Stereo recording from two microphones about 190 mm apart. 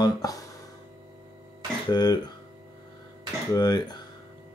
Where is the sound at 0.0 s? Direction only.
20° left (ahead or behind).